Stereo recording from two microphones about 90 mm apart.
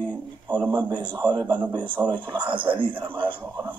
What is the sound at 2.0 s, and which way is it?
Speech, 15° right (ahead or behind).